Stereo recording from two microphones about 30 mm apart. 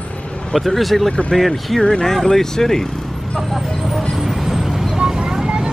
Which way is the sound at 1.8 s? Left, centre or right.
Centre.